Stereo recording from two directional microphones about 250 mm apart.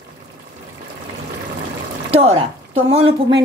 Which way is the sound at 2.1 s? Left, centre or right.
Right.